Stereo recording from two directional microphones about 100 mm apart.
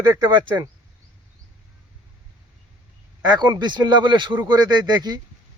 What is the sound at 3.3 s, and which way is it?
Speech, 45° right (ahead or behind).